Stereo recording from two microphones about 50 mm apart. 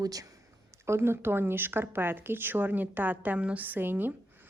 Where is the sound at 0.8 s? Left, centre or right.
Right.